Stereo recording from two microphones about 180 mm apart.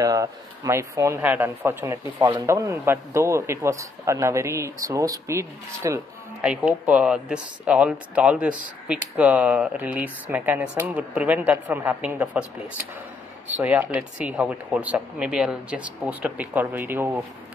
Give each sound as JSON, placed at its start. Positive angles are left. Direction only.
{"t": 0.0, "sound": "speech", "side_deg": -20}
{"t": 6.4, "sound": "speech", "side_deg": -5}